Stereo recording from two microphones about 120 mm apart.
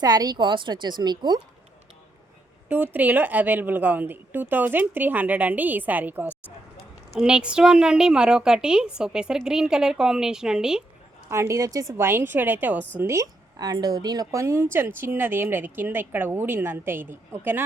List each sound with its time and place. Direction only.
0.0 s a woman's voice: 35° right (ahead or behind)
2.6 s a woman's voice: 15° right (ahead or behind)
11.3 s a woman's voice: 25° right (ahead or behind)